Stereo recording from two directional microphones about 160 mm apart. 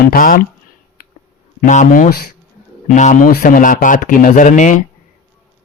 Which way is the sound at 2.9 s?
50° left (ahead or behind).